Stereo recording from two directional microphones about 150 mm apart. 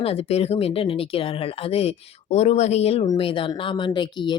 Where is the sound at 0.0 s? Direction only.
40° left (ahead or behind).